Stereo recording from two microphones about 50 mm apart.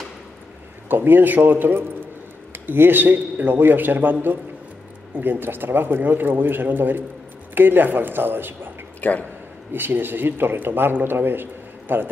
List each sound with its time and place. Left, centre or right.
0.8 s a man's voice: right
9.0 s speech: left
9.7 s a man's voice: right